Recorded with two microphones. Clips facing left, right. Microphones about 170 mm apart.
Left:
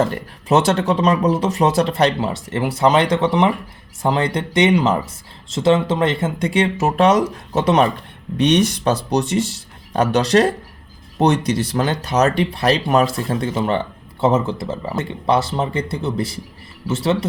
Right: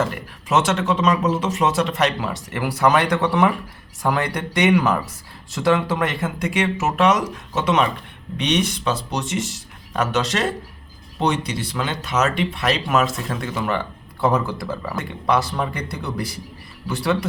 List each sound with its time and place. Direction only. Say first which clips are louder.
0.0 s speech: left 4 dB; 30° left (ahead or behind)